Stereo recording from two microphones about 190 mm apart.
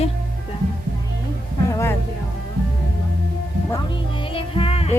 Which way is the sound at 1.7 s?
15° left (ahead or behind).